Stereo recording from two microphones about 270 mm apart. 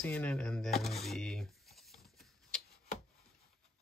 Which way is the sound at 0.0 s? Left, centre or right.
Centre.